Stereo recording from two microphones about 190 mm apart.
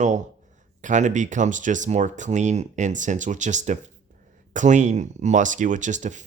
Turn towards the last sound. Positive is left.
turn(degrees=-40)  # may be behind; listen again after turning